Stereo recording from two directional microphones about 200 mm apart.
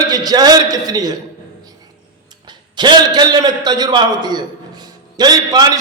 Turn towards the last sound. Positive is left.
turn(degrees=-20)  # may be behind; listen again after turning